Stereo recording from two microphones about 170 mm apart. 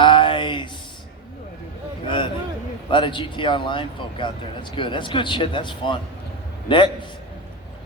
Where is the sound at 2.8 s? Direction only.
30° left (ahead or behind).